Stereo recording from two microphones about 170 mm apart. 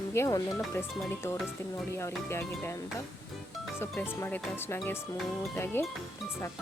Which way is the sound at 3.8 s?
10° left (ahead or behind).